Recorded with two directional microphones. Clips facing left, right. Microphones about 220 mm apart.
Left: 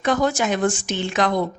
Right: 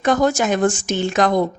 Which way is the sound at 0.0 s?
45° right (ahead or behind).